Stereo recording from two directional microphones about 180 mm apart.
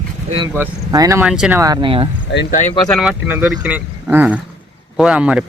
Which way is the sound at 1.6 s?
25° right (ahead or behind).